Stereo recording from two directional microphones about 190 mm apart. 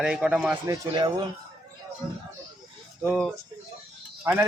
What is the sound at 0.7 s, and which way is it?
Speech, 20° right (ahead or behind).